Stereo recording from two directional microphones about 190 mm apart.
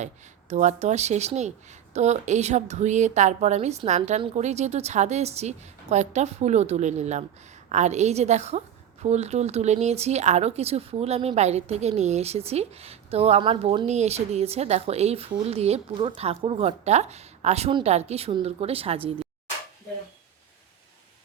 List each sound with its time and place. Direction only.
0.0 s a woman's voice: 40° right (ahead or behind)